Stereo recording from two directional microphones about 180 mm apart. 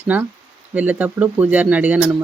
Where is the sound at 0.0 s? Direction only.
10° right (ahead or behind).